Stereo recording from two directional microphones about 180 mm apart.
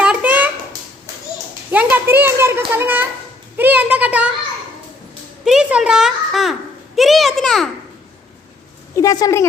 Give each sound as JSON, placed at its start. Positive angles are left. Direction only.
{"t": 0.0, "sound": "a sound", "side_deg": -10}
{"t": 1.7, "sound": "a child's voice", "side_deg": -10}
{"t": 5.5, "sound": "a child's voice", "side_deg": -5}
{"t": 9.0, "sound": "speech", "side_deg": 20}